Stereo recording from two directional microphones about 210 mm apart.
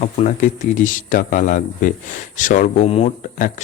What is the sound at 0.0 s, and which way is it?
Speech, 35° left (ahead or behind).